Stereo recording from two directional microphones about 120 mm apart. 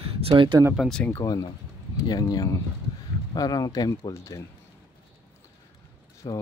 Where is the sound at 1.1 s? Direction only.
30° left (ahead or behind).